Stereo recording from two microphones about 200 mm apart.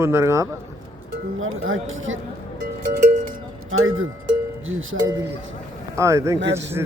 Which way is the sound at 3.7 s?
90° right.